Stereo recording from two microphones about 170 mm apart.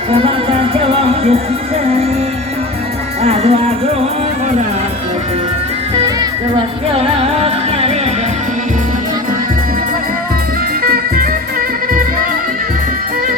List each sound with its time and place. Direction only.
0.1 s music: 35° right (ahead or behind)
3.2 s music: 35° right (ahead or behind)
7.0 s music: 40° right (ahead or behind)
10.8 s music: 60° right (ahead or behind)